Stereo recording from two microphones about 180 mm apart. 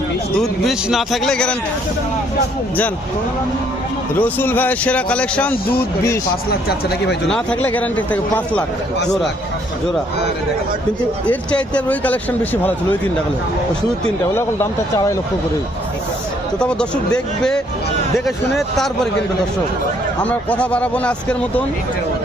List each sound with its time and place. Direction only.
0.6 s speech: centre (ahead or behind)
4.2 s speech: 10° left (ahead or behind)
6.5 s speech: 60° left (ahead or behind)
7.3 s speech: 5° left (ahead or behind)
11.3 s speech: 5° left (ahead or behind)
14.3 s speech: 15° left (ahead or behind)
16.6 s speech: 5° left (ahead or behind)
20.2 s speech: 10° left (ahead or behind)